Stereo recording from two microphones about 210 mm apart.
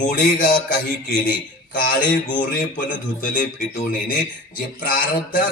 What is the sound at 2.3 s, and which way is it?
Speech, 40° left (ahead or behind).